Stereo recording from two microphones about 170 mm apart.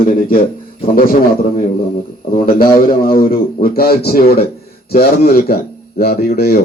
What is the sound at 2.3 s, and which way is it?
Speech, 55° left (ahead or behind).